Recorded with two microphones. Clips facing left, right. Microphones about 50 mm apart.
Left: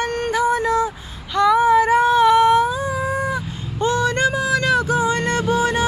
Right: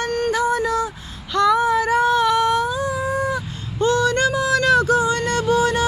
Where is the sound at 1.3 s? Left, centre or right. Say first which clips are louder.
Left 2 dB; centre.